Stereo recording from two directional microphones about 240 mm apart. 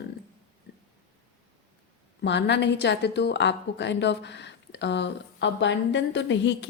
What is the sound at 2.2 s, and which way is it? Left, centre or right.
A woman's voice, left.